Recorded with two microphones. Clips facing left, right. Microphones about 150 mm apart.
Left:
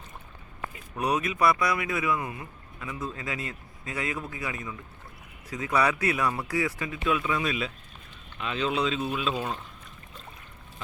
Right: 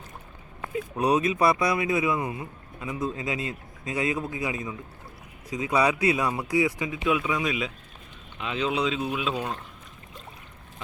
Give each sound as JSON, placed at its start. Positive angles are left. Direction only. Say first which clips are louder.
{"t": 0.9, "sound": "speech", "louder": "right 4 dB", "side_deg": -25}